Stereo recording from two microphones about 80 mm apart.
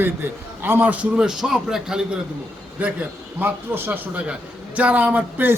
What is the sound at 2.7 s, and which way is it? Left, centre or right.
A man's voice, centre.